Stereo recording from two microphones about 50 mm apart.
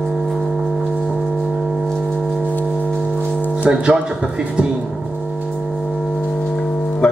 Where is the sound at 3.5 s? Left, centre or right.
Centre.